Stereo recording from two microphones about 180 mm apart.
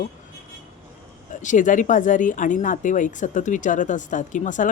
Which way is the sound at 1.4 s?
45° left (ahead or behind).